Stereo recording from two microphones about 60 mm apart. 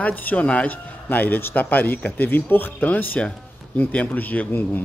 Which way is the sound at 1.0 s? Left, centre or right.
Left.